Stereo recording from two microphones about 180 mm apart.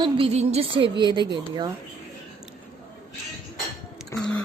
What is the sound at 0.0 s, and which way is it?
A woman's voice, 35° right (ahead or behind).